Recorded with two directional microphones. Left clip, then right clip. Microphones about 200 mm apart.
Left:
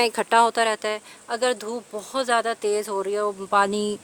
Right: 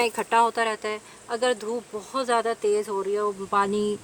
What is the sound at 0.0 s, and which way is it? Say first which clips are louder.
Speech: left 3 dB; 50° left (ahead or behind).